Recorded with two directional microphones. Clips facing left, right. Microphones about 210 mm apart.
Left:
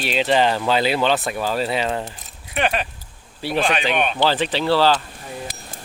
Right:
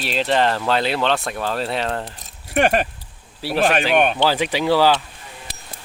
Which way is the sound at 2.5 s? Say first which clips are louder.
Right 5 dB; 45° right (ahead or behind).